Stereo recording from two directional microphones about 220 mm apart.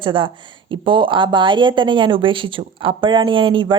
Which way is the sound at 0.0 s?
20° right (ahead or behind).